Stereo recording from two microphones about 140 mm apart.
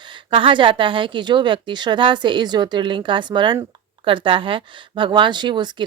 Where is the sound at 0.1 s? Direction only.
40° right (ahead or behind).